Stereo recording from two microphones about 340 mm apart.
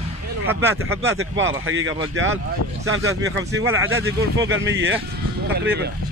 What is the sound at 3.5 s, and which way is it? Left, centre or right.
Speech, right.